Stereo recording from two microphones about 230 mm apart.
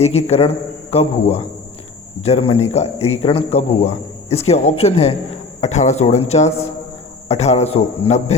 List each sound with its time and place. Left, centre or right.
0.0 s a man's voice: left